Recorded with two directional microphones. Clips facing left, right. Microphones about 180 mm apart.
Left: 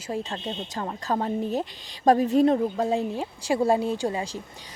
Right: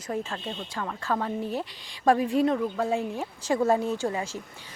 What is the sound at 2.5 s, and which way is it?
Speech, 30° left (ahead or behind).